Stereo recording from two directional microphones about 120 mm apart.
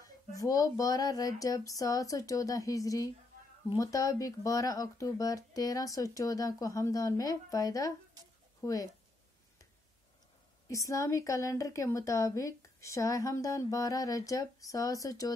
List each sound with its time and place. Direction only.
0.0 s a woman's voice: 30° left (ahead or behind)
10.7 s a woman's voice: 25° left (ahead or behind)